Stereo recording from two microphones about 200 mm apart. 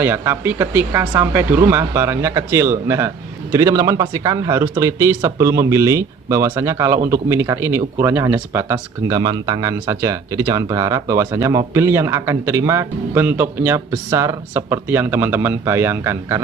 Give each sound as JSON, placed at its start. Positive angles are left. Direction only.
{"t": 0.0, "sound": "speech", "side_deg": -10}